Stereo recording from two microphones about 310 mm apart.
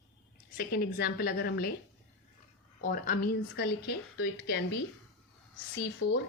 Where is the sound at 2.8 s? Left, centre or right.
Left.